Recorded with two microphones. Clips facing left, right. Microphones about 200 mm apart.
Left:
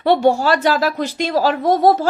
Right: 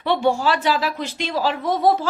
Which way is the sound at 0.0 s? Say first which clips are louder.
Left 5 dB; 40° left (ahead or behind).